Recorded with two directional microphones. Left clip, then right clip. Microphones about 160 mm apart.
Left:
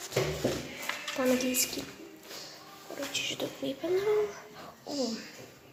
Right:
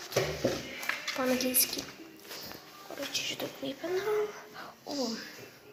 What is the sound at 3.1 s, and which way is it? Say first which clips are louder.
Speech: left 2 dB; 15° left (ahead or behind).